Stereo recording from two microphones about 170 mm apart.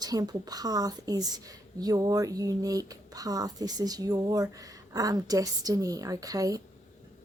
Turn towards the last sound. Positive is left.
turn(degrees=-20)  # may be behind; listen again after turning